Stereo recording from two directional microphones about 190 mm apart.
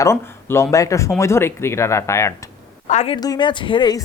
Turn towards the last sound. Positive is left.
turn(degrees=25)  # may be behind; listen again after turning